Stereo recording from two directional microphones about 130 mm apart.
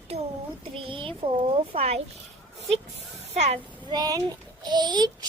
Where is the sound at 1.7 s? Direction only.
50° right (ahead or behind).